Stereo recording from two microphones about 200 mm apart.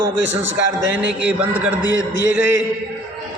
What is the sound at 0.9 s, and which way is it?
Speech, 5° right (ahead or behind).